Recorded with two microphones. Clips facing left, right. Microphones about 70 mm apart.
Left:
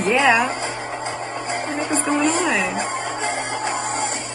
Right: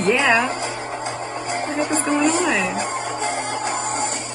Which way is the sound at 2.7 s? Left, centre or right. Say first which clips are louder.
Even; left.